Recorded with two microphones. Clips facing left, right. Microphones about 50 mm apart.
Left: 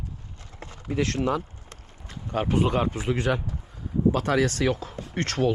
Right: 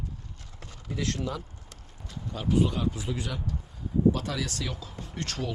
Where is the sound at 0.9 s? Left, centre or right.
Left.